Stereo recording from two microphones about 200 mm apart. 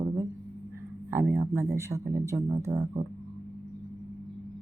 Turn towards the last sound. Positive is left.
turn(degrees=-15)  # may be behind; listen again after turning